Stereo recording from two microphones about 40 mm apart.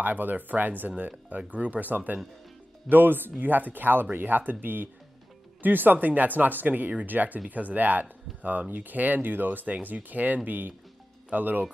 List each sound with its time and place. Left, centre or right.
0.0 s speech: right
6.7 s speech: right